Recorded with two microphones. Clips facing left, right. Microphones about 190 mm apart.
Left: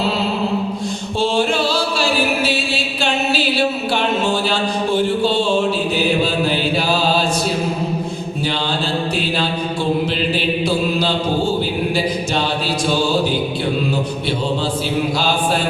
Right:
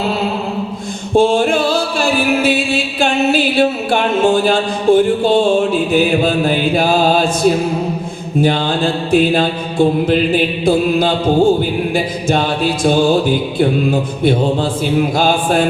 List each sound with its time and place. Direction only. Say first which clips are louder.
1.1 s music: right 6 dB; 50° right (ahead or behind)
8.4 s mantra: right 9 dB; 50° right (ahead or behind)
15.2 s mantra: right 5 dB; 50° right (ahead or behind)